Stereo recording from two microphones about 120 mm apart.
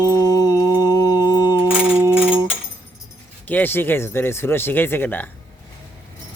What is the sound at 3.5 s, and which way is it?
Speech, 15° left (ahead or behind).